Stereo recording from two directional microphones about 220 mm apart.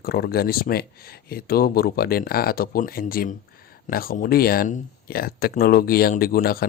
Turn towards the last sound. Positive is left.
turn(degrees=40)  # may be behind; listen again after turning